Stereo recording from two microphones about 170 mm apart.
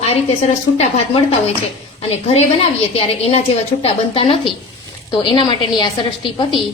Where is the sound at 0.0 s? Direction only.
35° left (ahead or behind).